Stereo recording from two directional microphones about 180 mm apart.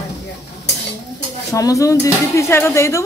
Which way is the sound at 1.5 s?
20° left (ahead or behind).